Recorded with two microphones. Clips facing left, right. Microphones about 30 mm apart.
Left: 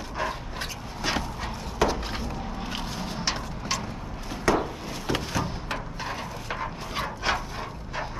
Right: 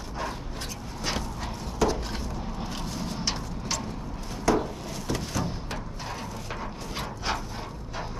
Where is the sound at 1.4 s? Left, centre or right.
Left.